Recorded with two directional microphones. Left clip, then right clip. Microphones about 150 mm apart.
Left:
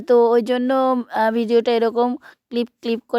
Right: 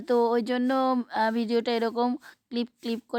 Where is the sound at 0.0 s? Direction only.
30° left (ahead or behind).